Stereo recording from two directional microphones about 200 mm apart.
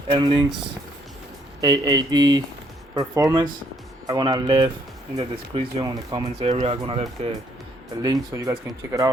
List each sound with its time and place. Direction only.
0.1 s speech: 25° right (ahead or behind)
1.6 s speech: 20° right (ahead or behind)
8.0 s speech: 20° right (ahead or behind)